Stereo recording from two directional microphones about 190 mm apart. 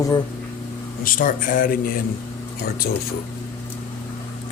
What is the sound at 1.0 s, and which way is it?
Speech, 45° left (ahead or behind).